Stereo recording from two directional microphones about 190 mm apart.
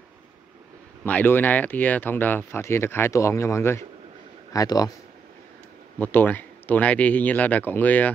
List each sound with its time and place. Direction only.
1.0 s speech: 10° left (ahead or behind)
5.9 s speech: 10° left (ahead or behind)